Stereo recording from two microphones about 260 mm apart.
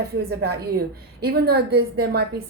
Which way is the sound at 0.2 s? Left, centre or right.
Right.